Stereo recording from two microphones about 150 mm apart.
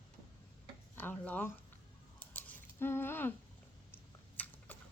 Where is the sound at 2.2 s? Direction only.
10° left (ahead or behind).